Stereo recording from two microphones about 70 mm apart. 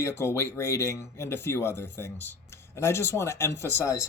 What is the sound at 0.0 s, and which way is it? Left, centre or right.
Speech, left.